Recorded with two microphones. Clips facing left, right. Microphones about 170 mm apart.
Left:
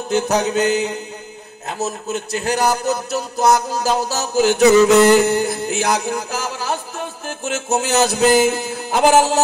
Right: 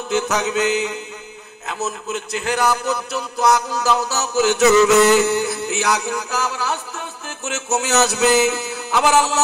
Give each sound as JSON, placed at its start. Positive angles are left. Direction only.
{"t": 0.1, "sound": "a man's voice", "side_deg": 35}
{"t": 5.2, "sound": "music", "side_deg": 45}
{"t": 8.3, "sound": "mantra", "side_deg": 50}